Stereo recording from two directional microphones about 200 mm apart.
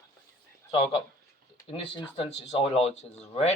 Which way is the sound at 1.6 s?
25° left (ahead or behind).